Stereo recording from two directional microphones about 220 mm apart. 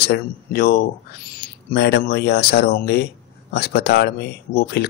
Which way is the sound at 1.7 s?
50° left (ahead or behind).